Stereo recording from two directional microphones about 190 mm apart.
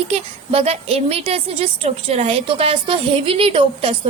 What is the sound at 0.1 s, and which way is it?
A woman's voice, 30° right (ahead or behind).